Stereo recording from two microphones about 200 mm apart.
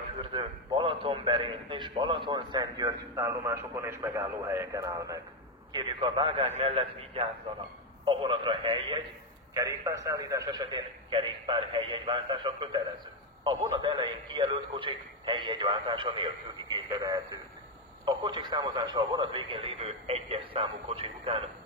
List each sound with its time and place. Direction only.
0.3 s a man's voice: 25° right (ahead or behind)